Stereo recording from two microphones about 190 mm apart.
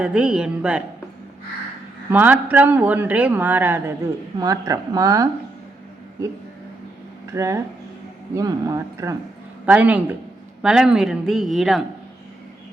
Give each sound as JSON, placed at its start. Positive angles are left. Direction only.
{"t": 0.0, "sound": "speech", "side_deg": -5}
{"t": 2.0, "sound": "a woman's voice", "side_deg": -10}
{"t": 7.3, "sound": "speech", "side_deg": -15}